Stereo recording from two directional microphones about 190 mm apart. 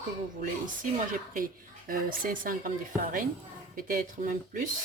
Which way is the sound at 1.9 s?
45° right (ahead or behind).